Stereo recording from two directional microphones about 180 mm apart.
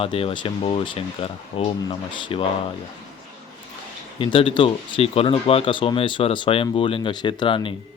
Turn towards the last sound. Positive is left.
turn(degrees=30)  # may be behind; listen again after turning